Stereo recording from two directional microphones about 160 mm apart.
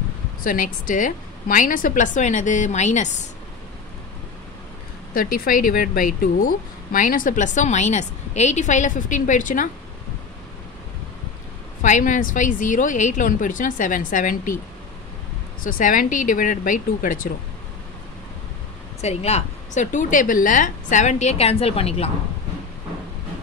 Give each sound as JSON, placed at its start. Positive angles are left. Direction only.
{"t": 0.4, "sound": "a woman's voice", "side_deg": 60}
{"t": 5.1, "sound": "speech", "side_deg": 65}
{"t": 11.8, "sound": "a woman's voice", "side_deg": 50}
{"t": 15.6, "sound": "speech", "side_deg": 60}
{"t": 18.9, "sound": "a woman's voice", "side_deg": 40}